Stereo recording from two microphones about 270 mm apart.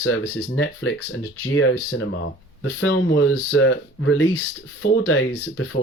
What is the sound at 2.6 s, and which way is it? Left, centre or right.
Speech, left.